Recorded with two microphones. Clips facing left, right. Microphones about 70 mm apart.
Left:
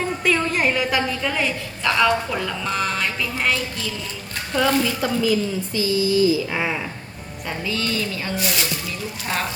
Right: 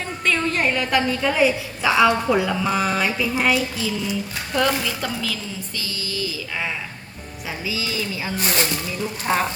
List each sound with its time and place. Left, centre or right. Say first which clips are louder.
0.3 s a woman's voice: even; centre
4.7 s a sound: left 4 dB; centre
4.9 s speech: left 7 dB; centre
7.6 s a sound: left 2 dB; centre
8.4 s speech: right 3 dB; right
9.3 s a woman's voice: right 5 dB; centre